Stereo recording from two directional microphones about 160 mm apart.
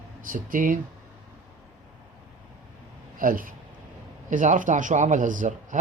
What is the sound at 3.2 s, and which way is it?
Speech, 60° right (ahead or behind).